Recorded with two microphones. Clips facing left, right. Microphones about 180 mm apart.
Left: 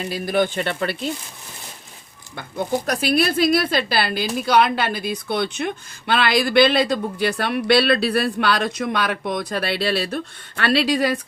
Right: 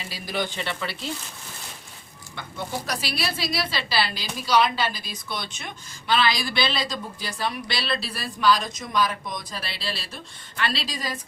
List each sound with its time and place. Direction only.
0.0 s a woman's voice: 50° left (ahead or behind)
2.8 s a woman's voice: 50° left (ahead or behind); by 11.2 s 65° left (ahead or behind)